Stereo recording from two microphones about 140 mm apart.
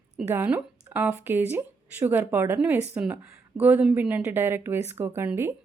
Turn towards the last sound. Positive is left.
turn(degrees=-15)  # may be behind; listen again after turning